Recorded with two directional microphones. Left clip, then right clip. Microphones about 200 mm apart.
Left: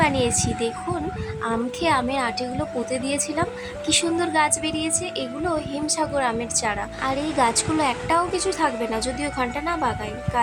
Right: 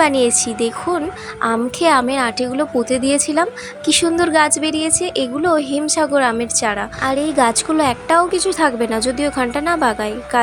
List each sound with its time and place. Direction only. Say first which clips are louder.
0.0 s a woman's voice: right 7 dB; 25° right (ahead or behind)